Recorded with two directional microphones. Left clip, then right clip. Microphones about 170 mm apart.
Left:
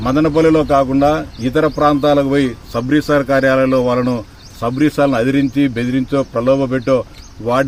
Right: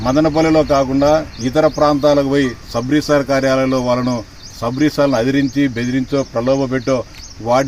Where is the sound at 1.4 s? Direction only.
45° left (ahead or behind).